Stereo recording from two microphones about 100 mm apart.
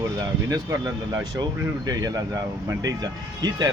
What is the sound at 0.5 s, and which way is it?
A man's voice, 35° right (ahead or behind).